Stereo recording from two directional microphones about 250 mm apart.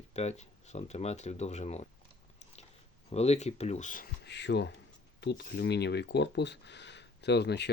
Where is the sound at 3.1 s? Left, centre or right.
Left.